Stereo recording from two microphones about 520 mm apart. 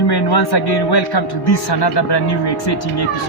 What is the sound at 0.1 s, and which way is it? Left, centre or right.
Speech, left.